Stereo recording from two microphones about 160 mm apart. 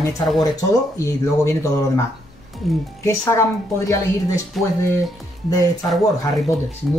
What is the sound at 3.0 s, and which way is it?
Speech, 20° left (ahead or behind).